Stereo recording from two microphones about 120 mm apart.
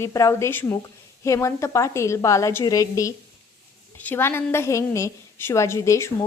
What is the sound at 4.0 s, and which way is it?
A woman's voice, 15° left (ahead or behind).